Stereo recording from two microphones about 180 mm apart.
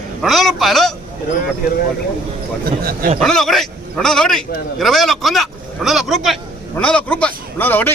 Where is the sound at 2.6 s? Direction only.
55° right (ahead or behind).